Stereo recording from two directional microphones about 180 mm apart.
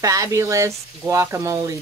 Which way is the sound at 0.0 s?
15° right (ahead or behind).